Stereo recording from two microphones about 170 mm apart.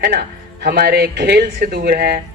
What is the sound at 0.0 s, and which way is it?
Speech, 70° right (ahead or behind).